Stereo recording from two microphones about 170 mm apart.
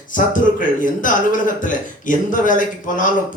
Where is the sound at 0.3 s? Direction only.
50° left (ahead or behind).